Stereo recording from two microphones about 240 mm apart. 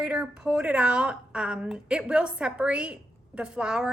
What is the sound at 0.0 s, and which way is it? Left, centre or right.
A woman's voice, centre.